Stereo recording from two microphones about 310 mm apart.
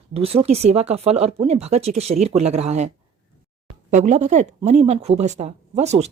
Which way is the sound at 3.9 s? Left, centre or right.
Right.